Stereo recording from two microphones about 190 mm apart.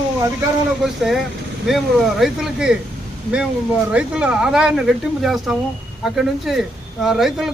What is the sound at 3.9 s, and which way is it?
Speech, 5° right (ahead or behind).